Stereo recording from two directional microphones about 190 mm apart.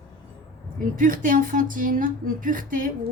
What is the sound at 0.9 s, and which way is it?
Speech, 45° right (ahead or behind).